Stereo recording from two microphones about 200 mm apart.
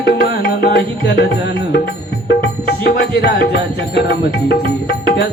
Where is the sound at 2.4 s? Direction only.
55° left (ahead or behind).